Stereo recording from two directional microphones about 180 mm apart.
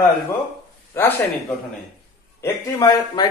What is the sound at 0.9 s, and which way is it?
Speech, 15° left (ahead or behind).